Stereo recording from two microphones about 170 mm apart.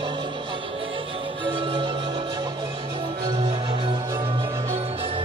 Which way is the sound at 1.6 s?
30° right (ahead or behind).